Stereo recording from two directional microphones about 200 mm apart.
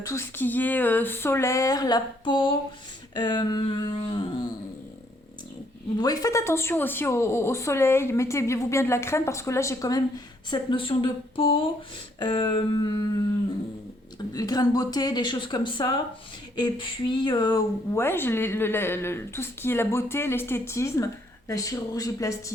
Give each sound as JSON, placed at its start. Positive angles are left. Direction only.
{"t": 0.0, "sound": "a woman's voice", "side_deg": 15}
{"t": 6.0, "sound": "a woman's voice", "side_deg": 20}
{"t": 14.3, "sound": "a woman's voice", "side_deg": 20}